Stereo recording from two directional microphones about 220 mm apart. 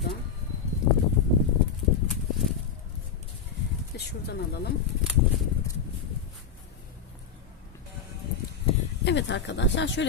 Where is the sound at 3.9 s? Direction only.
50° left (ahead or behind).